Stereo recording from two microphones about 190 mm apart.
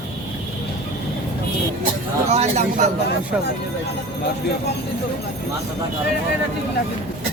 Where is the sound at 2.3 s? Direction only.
35° right (ahead or behind).